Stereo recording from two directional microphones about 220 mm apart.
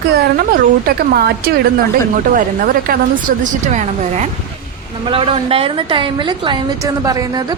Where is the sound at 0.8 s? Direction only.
45° right (ahead or behind).